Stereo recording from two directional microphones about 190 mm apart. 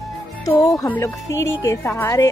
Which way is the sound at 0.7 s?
10° left (ahead or behind).